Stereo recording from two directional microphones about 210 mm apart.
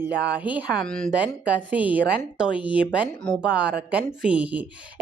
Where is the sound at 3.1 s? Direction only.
5° left (ahead or behind).